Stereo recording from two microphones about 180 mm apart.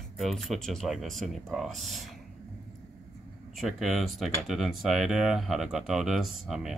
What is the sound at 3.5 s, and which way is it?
Speech, centre (ahead or behind).